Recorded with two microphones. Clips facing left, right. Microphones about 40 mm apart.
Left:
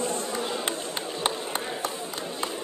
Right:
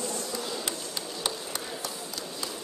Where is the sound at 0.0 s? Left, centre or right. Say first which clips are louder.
Left 5 dB; left.